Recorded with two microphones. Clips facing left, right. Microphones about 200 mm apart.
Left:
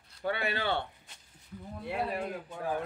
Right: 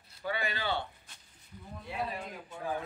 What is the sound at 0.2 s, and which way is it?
Speech, 60° left (ahead or behind).